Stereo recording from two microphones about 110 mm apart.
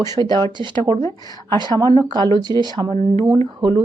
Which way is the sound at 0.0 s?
40° right (ahead or behind).